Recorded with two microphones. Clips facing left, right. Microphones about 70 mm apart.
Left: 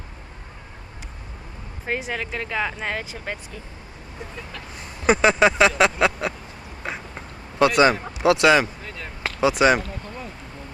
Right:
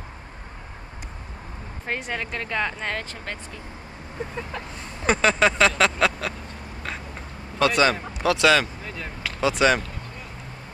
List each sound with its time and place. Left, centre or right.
1.9 s speech: centre
4.2 s a sound: right
5.0 s vehicle: centre
6.8 s a sound: centre
7.5 s speech: centre
8.8 s basketball bounce: centre
9.4 s vehicle: centre